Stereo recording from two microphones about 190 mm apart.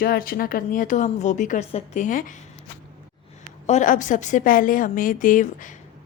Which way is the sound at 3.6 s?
40° left (ahead or behind).